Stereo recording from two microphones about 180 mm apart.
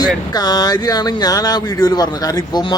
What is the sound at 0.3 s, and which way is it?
Speech, 20° left (ahead or behind).